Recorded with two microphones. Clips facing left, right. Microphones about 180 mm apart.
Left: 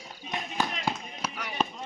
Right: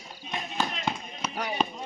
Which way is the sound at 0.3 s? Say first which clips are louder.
Even; 10° left (ahead or behind).